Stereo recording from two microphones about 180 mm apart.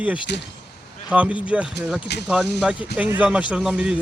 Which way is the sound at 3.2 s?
5° right (ahead or behind).